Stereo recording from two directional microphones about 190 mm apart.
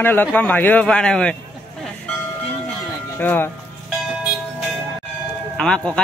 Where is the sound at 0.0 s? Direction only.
10° left (ahead or behind).